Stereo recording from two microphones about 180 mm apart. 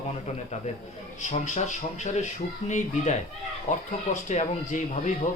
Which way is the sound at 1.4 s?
40° left (ahead or behind).